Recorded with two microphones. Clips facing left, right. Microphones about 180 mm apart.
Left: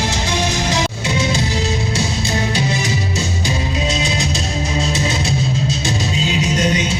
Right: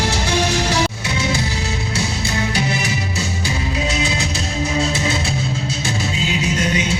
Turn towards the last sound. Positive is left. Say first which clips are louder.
# left 3 dB
turn(degrees=25)  # may be behind; listen again after turning